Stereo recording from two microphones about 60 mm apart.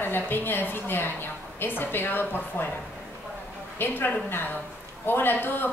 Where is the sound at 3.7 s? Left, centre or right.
Left.